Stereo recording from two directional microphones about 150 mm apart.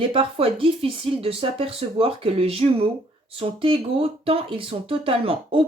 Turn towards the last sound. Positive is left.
turn(degrees=-40)  # may be behind; listen again after turning